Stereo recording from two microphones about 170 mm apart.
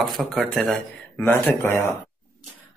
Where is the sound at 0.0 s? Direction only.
Centre (ahead or behind).